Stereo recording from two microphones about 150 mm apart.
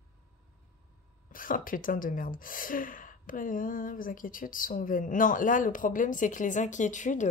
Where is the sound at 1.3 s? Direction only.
65° left (ahead or behind).